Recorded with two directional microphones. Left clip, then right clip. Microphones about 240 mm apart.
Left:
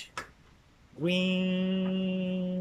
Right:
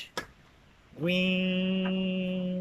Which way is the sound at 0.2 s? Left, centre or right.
Right.